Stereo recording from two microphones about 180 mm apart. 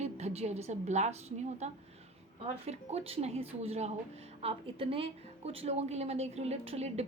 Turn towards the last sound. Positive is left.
turn(degrees=-35)  # may be behind; listen again after turning